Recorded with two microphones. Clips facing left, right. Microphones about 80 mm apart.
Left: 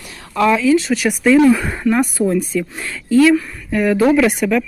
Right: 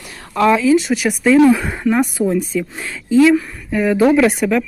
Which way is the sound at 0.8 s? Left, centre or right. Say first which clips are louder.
Even; centre.